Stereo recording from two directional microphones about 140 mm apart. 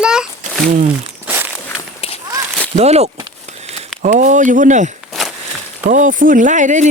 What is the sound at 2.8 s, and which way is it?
Speech, 50° right (ahead or behind).